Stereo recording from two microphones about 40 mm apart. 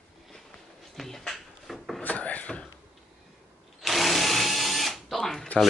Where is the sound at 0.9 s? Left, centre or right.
Centre.